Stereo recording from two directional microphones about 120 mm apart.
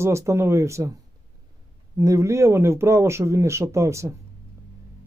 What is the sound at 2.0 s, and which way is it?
Speech, 25° right (ahead or behind).